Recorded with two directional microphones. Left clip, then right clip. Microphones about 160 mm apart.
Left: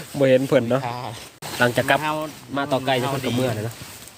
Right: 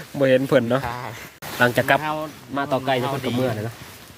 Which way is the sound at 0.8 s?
90° left.